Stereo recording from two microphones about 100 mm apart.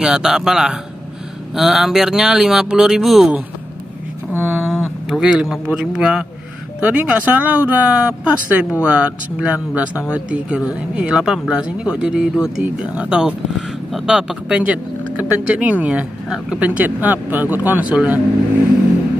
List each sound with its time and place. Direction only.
0.0 s speech: 5° right (ahead or behind)
4.4 s a sound: 20° right (ahead or behind)
5.1 s speech: 5° right (ahead or behind)